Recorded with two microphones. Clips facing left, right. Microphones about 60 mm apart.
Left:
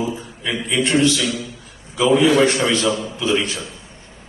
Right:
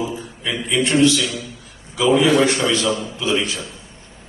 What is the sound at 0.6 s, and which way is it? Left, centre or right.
A man's voice, left.